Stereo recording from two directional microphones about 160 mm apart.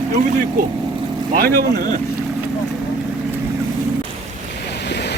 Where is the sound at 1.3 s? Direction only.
65° right (ahead or behind).